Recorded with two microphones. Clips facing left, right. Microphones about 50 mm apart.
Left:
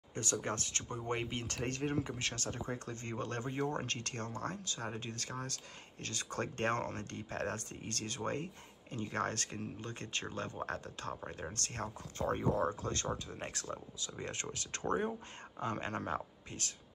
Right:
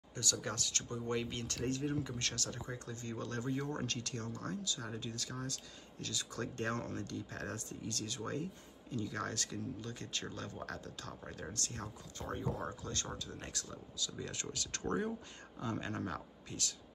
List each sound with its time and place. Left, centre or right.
0.1 s speech: left
1.3 s speech: left
1.6 s speech: left
2.3 s speech: left
11.5 s speech: left